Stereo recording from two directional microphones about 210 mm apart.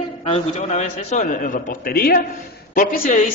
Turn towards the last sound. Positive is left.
turn(degrees=40)  # may be behind; listen again after turning